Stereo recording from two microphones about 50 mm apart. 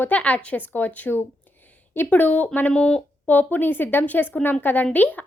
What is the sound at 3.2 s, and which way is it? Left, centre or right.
A woman's voice, left.